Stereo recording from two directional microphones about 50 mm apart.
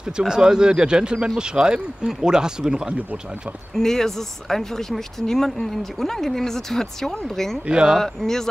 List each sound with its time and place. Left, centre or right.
0.3 s speech: centre
2.9 s speech: right
3.7 s speech: centre
7.6 s speech: centre
8.0 s speech: centre